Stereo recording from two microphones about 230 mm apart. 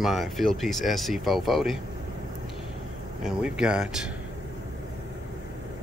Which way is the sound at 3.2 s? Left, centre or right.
Centre.